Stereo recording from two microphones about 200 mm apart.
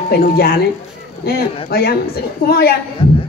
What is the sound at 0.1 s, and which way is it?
Speech, 50° left (ahead or behind).